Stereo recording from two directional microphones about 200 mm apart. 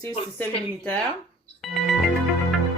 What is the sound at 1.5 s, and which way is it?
Music, centre (ahead or behind).